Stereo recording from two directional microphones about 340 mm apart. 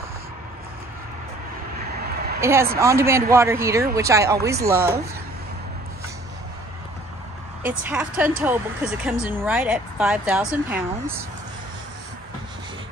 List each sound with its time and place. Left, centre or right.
2.4 s a man's voice: centre
7.6 s speech: centre